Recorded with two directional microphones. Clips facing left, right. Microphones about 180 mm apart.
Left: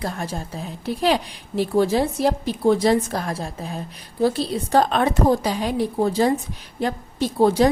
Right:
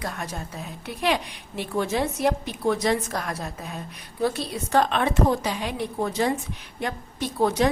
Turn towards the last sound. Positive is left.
turn(degrees=30)  # may be behind; listen again after turning